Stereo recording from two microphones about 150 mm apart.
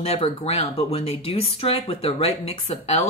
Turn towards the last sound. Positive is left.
turn(degrees=45)  # may be behind; listen again after turning